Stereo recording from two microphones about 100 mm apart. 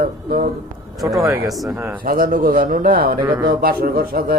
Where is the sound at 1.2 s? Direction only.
25° right (ahead or behind).